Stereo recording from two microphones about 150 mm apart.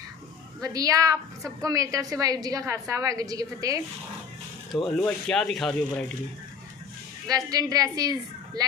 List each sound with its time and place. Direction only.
0.6 s a woman's voice: 25° right (ahead or behind)
4.8 s speech: 5° left (ahead or behind)
7.2 s a woman's voice: 25° right (ahead or behind)